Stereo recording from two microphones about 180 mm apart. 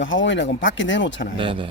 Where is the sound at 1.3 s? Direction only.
30° right (ahead or behind).